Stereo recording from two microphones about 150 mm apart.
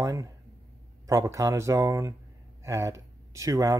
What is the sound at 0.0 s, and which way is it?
Speech, 20° right (ahead or behind).